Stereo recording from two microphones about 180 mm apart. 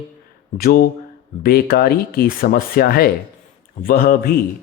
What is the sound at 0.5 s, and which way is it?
Speech, 55° left (ahead or behind).